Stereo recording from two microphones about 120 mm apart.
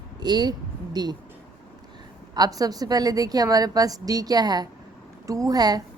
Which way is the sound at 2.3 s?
30° right (ahead or behind).